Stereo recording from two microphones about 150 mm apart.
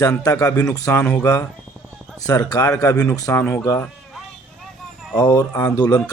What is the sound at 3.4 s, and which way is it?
Speech, 10° left (ahead or behind).